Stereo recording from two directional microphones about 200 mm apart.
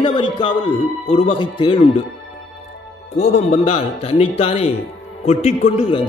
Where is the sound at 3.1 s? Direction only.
35° left (ahead or behind).